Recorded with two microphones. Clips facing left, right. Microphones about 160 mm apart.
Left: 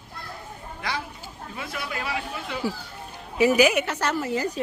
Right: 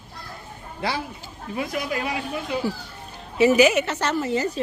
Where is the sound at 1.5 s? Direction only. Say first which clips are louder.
Right 7 dB; 20° right (ahead or behind).